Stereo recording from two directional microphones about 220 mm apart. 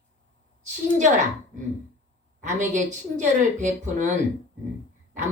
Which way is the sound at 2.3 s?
35° right (ahead or behind).